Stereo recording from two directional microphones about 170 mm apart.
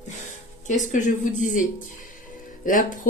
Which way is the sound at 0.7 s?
50° left (ahead or behind).